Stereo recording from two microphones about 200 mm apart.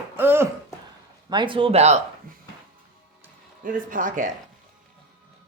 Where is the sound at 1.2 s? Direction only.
25° right (ahead or behind).